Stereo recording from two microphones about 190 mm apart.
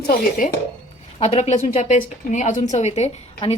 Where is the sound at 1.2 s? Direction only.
35° left (ahead or behind).